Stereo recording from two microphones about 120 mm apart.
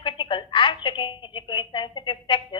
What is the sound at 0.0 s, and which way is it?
A woman's voice, 45° left (ahead or behind).